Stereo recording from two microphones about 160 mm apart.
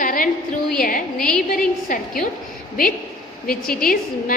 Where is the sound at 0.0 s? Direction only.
60° left (ahead or behind).